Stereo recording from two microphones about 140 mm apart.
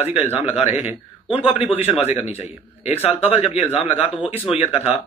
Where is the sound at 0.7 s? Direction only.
10° right (ahead or behind).